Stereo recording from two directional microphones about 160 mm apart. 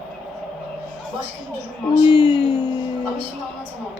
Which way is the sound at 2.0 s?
30° left (ahead or behind).